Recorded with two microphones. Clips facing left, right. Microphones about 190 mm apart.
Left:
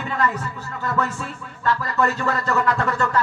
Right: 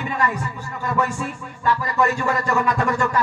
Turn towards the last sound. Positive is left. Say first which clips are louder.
# right 1 dB
turn(degrees=-15)  # may be behind; listen again after turning